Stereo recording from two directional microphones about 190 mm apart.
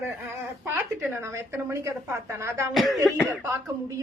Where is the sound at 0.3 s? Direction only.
15° right (ahead or behind).